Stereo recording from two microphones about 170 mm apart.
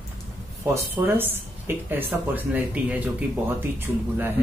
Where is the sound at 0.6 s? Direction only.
15° right (ahead or behind).